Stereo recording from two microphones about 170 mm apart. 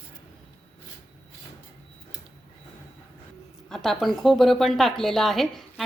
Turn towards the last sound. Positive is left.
turn(degrees=0)  # may be behind; listen again after turning